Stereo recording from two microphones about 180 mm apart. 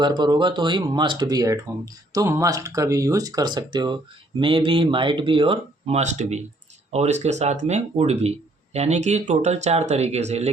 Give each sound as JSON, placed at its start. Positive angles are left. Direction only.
{"t": 0.0, "sound": "speech", "side_deg": -25}